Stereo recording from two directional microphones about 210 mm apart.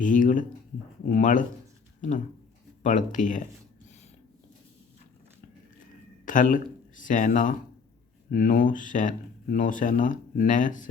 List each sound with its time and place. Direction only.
0.0 s speech: 40° left (ahead or behind)
6.2 s speech: 40° left (ahead or behind)